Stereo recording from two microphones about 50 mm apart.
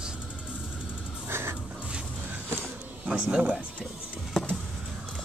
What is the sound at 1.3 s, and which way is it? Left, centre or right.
Crow, right.